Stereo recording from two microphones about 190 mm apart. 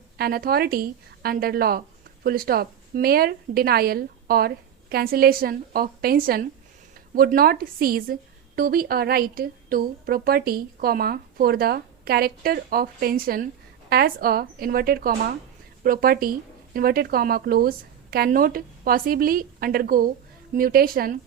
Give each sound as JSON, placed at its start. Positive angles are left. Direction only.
{"t": 0.2, "sound": "a woman's voice", "side_deg": -55}